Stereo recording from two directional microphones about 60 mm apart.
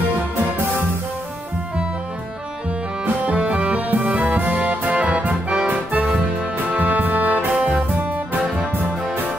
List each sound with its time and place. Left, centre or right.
3.3 s music: centre